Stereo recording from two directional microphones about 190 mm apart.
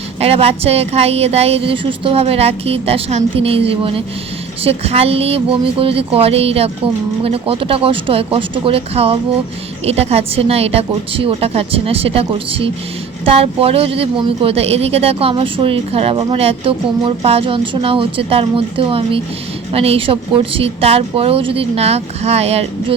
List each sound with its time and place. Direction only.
0.2 s speech: 30° right (ahead or behind)